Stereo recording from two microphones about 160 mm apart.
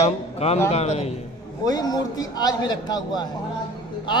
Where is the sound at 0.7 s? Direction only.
40° left (ahead or behind).